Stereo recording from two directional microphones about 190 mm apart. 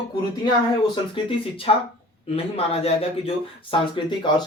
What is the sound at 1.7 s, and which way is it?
A man's voice, 30° left (ahead or behind).